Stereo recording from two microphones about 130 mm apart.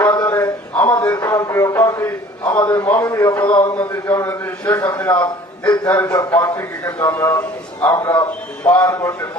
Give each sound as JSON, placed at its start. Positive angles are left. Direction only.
{"t": 0.0, "sound": "a sound", "side_deg": 25}
{"t": 0.3, "sound": "a sound", "side_deg": 15}
{"t": 2.6, "sound": "a man's voice", "side_deg": 15}
{"t": 3.0, "sound": "a man's voice", "side_deg": 30}
{"t": 3.8, "sound": "a man's voice", "side_deg": 15}
{"t": 5.2, "sound": "a man's voice", "side_deg": 30}
{"t": 5.9, "sound": "a man's voice", "side_deg": 15}
{"t": 6.1, "sound": "a man's voice", "side_deg": 30}
{"t": 6.8, "sound": "a man's voice", "side_deg": 15}